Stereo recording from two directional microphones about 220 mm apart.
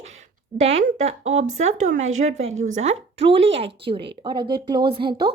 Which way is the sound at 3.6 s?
50° right (ahead or behind).